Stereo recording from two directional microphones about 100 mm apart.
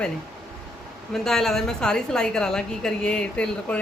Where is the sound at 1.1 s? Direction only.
5° left (ahead or behind).